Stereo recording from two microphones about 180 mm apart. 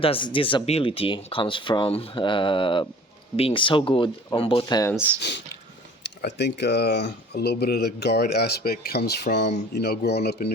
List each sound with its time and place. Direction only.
0.0 s speech: 30° left (ahead or behind)
5.2 s speech: 70° left (ahead or behind)